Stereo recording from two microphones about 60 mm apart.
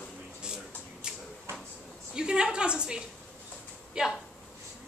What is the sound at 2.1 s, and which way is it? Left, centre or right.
Speech, centre.